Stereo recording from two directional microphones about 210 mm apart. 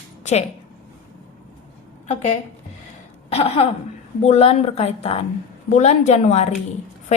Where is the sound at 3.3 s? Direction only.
30° left (ahead or behind).